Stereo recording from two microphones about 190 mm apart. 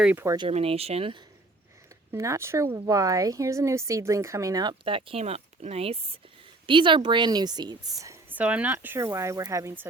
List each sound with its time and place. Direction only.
0.0 s speech: 10° right (ahead or behind)
0.3 s speech: 30° right (ahead or behind)
2.1 s speech: 15° right (ahead or behind)